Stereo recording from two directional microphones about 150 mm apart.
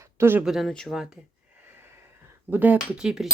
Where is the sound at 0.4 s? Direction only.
Centre (ahead or behind).